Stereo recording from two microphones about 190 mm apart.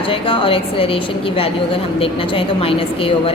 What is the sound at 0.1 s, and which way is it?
A woman's voice, 30° left (ahead or behind).